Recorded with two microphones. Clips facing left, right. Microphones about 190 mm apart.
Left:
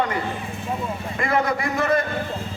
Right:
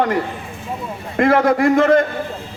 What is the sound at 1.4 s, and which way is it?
Speech, 55° right (ahead or behind).